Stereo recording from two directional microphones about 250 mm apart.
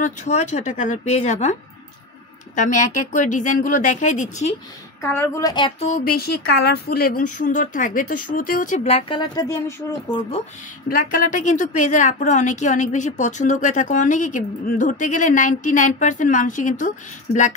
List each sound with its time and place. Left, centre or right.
0.0 s a woman's voice: left
5.0 s a woman's voice: centre
10.9 s a woman's voice: left